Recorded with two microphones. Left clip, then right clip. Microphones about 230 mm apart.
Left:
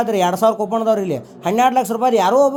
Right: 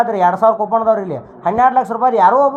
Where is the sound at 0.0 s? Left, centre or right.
Left.